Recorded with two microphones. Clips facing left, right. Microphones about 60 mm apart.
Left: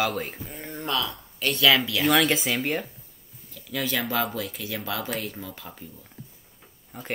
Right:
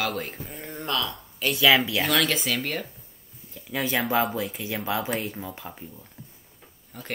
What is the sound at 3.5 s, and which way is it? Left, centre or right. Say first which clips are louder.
Speech: right 1 dB; right.